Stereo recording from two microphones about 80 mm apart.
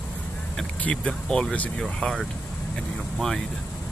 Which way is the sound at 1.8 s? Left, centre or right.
Centre.